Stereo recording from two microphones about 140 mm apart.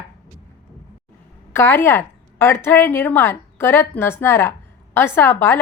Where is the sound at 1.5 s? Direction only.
15° left (ahead or behind).